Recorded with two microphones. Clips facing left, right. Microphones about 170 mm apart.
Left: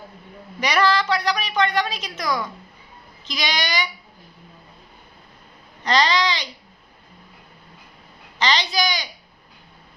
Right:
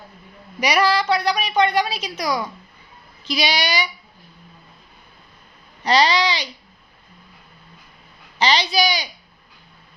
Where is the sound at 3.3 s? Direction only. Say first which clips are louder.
Right 7 dB; 20° left (ahead or behind).